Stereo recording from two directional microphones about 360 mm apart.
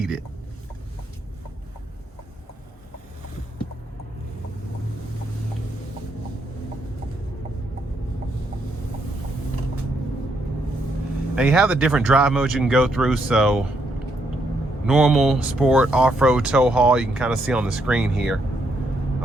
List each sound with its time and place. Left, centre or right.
11.3 s speech: centre
14.8 s speech: centre